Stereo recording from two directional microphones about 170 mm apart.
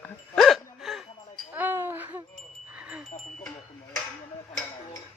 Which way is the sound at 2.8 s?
10° right (ahead or behind).